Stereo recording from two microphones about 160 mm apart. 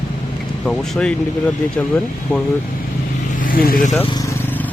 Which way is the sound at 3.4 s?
65° left (ahead or behind).